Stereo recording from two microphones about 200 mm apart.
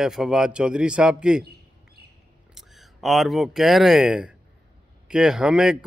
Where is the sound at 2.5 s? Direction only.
Centre (ahead or behind).